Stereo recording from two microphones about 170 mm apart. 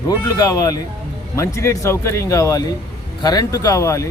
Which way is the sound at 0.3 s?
20° left (ahead or behind).